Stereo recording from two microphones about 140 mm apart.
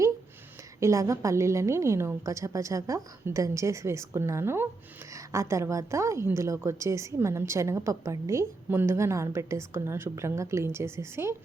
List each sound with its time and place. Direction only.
0.8 s a woman's voice: 20° right (ahead or behind)